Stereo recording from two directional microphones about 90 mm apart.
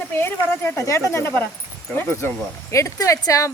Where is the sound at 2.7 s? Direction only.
35° left (ahead or behind).